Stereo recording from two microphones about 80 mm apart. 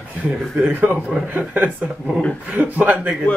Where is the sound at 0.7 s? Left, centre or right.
Right.